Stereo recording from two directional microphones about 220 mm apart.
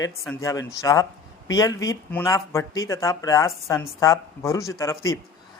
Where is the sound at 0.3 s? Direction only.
15° left (ahead or behind).